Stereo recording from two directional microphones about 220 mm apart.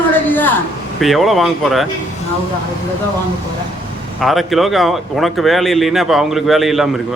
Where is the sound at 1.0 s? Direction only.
Centre (ahead or behind).